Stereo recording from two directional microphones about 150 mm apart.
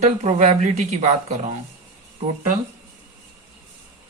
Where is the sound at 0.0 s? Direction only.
50° right (ahead or behind).